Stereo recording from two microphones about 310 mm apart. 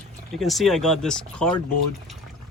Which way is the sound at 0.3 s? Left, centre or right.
Centre.